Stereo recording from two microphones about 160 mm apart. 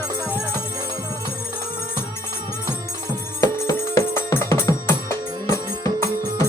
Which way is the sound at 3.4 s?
20° left (ahead or behind).